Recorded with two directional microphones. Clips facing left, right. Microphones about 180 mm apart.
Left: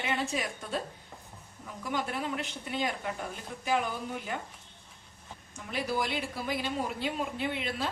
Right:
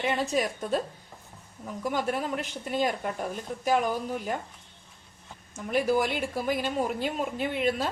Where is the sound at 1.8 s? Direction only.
45° right (ahead or behind).